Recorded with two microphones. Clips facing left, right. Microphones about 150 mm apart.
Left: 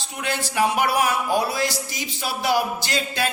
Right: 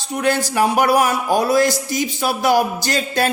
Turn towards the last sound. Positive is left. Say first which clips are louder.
# right 6 dB
turn(degrees=-45)  # may be behind; listen again after turning